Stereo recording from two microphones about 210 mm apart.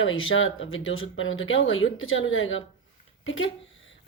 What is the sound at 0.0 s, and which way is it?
Speech, 70° left (ahead or behind).